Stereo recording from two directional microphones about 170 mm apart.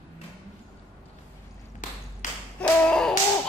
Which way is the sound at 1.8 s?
50° left (ahead or behind).